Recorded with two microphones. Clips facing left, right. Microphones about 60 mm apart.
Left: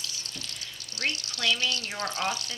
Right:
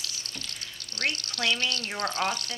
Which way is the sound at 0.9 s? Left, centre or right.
Right.